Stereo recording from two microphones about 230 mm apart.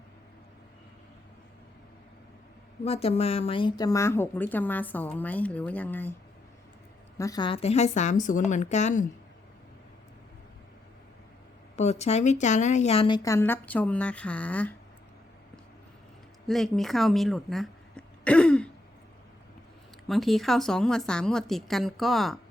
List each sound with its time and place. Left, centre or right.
2.8 s a woman's voice: left; by 6.1 s centre
7.2 s a woman's voice: centre
11.8 s a woman's voice: left; by 14.7 s centre
16.5 s speech: centre
20.1 s a woman's voice: centre